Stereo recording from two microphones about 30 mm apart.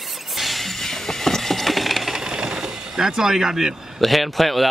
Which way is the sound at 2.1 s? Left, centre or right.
Right.